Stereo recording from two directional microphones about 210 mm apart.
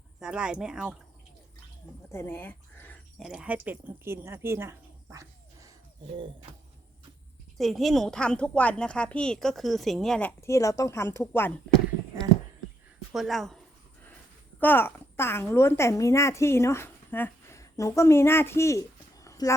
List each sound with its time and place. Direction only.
0.2 s speech: 5° right (ahead or behind)
2.1 s speech: 10° left (ahead or behind)
3.2 s speech: centre (ahead or behind)
6.1 s bird: 25° right (ahead or behind)
7.6 s speech: centre (ahead or behind)
13.1 s speech: centre (ahead or behind)
14.6 s speech: 10° left (ahead or behind)